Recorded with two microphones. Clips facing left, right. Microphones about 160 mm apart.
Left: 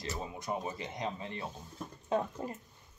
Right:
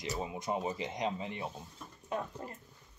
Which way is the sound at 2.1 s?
20° left (ahead or behind).